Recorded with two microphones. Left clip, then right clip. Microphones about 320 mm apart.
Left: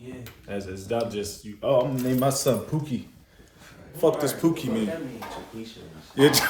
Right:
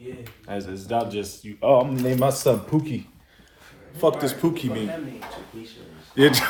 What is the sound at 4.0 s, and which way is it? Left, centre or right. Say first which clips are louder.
Speech: right 1 dB; right.